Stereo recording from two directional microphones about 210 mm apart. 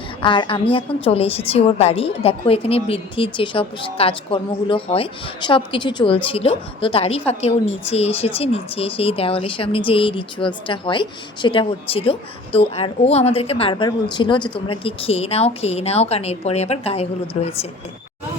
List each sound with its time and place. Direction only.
0.2 s a woman's voice: 25° left (ahead or behind)